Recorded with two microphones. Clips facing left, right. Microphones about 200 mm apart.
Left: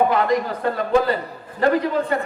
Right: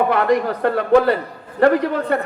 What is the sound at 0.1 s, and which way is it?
A man's voice, 65° right (ahead or behind).